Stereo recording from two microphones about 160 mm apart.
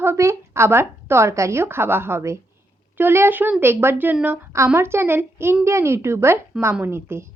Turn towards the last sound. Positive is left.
turn(degrees=-15)  # may be behind; listen again after turning